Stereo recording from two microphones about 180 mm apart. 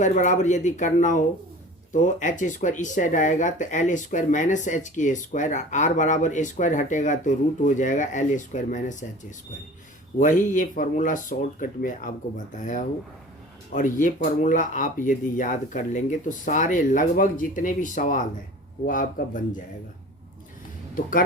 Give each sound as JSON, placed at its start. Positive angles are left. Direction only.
{"t": 0.0, "sound": "speech", "side_deg": 45}
{"t": 10.2, "sound": "speech", "side_deg": 45}
{"t": 13.7, "sound": "speech", "side_deg": 45}
{"t": 20.9, "sound": "speech", "side_deg": 50}